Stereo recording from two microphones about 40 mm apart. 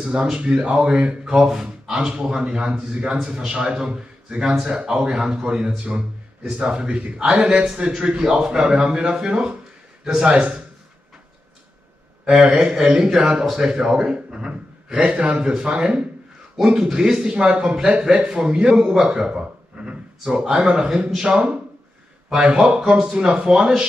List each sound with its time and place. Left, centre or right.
0.0 s speech: right
1.2 s a man's voice: centre
5.9 s a sound: centre
6.6 s a man's voice: right
12.6 s a man's voice: centre
16.5 s a man's voice: centre